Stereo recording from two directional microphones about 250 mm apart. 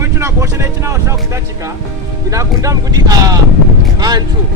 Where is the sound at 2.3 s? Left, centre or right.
Centre.